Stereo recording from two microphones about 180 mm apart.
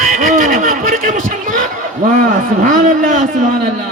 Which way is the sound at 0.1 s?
45° right (ahead or behind).